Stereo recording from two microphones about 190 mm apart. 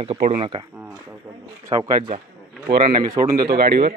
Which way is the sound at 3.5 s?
60° right (ahead or behind).